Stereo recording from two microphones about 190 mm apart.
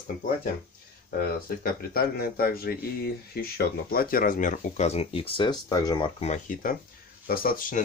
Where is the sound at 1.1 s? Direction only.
55° left (ahead or behind).